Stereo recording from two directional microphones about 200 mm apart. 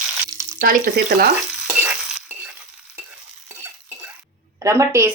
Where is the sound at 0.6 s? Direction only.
45° right (ahead or behind).